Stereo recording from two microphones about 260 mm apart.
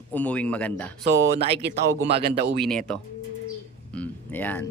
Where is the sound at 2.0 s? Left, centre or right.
Right.